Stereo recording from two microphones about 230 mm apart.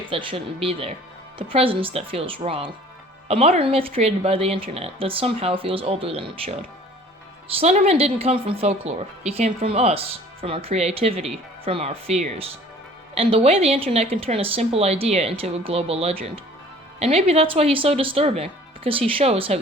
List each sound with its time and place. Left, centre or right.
0.1 s speech: right